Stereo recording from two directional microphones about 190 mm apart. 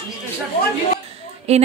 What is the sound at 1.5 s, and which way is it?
Speech, 35° right (ahead or behind).